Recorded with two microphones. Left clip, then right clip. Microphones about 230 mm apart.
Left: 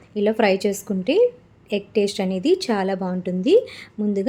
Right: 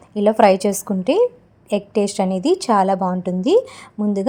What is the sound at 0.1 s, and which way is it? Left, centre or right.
A woman's voice, centre.